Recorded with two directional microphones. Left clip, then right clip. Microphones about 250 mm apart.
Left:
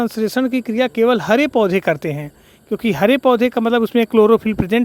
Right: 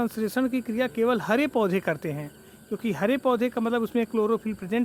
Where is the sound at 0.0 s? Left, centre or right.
Left.